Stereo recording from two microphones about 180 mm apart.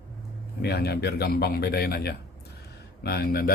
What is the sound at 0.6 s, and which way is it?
Speech, 65° left (ahead or behind).